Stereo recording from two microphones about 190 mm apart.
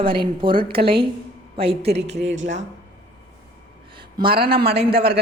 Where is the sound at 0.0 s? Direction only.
25° right (ahead or behind).